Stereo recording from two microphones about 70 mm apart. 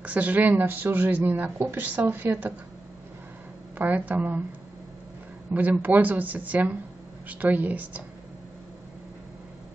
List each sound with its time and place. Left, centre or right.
0.0 s speech: right
3.7 s speech: right
5.5 s speech: right